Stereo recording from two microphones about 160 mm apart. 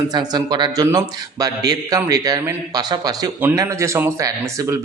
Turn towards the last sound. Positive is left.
turn(degrees=-20)  # may be behind; listen again after turning